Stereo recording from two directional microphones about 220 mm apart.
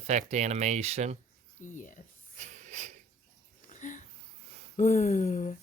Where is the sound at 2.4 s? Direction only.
30° right (ahead or behind).